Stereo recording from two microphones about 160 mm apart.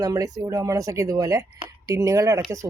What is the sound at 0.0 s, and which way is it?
Speech, 20° right (ahead or behind).